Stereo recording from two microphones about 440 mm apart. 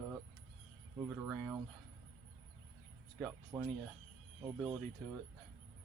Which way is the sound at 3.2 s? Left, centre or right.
Centre.